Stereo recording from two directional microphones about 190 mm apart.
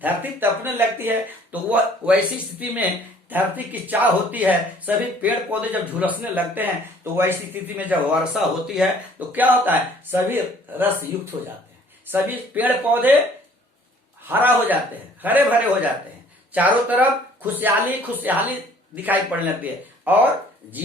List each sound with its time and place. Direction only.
0.0 s speech: 10° right (ahead or behind)
11.3 s speech: 20° right (ahead or behind)
12.0 s speech: 10° right (ahead or behind)
14.3 s speech: 10° right (ahead or behind)